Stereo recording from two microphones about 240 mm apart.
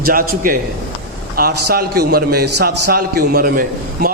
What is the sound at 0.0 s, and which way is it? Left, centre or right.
A man's voice, right.